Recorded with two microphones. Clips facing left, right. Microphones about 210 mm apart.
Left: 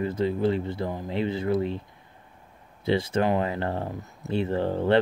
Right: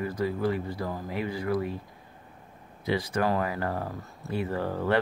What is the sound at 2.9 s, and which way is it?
Speech, 25° left (ahead or behind).